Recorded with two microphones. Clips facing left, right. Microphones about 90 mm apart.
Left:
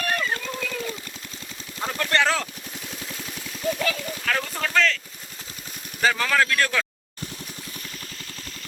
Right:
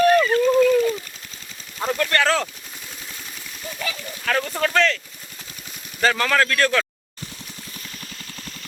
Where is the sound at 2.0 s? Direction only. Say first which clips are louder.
Right 2 dB; 20° left (ahead or behind).